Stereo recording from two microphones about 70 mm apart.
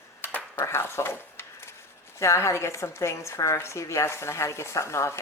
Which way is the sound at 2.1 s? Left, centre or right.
Left.